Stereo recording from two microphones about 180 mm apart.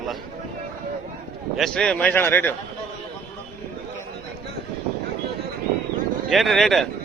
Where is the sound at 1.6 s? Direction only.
5° left (ahead or behind).